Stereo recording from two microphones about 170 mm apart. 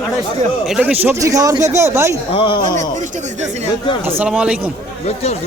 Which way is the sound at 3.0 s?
45° right (ahead or behind).